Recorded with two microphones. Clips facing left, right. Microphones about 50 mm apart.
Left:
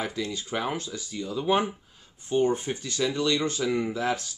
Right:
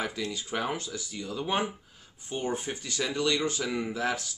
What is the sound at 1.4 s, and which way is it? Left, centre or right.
Speech, centre.